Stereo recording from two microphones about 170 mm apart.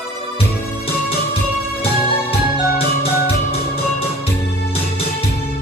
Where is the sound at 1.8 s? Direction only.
35° left (ahead or behind).